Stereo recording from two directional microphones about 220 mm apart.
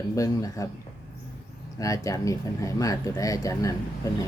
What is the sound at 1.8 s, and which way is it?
Speech, 15° left (ahead or behind).